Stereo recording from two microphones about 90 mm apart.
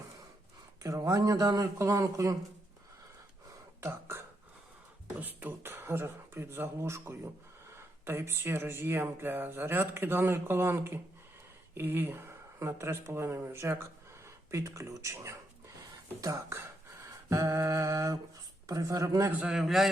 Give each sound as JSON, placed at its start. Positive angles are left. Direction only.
{"t": 0.8, "sound": "speech", "side_deg": -35}
{"t": 3.8, "sound": "throat clearing", "side_deg": -25}
{"t": 5.1, "sound": "speech", "side_deg": -20}
{"t": 19.3, "sound": "a man's voice", "side_deg": -15}
{"t": 19.5, "sound": "a man's voice", "side_deg": 0}